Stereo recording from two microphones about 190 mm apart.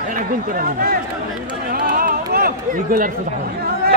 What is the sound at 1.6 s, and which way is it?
Music, 50° right (ahead or behind).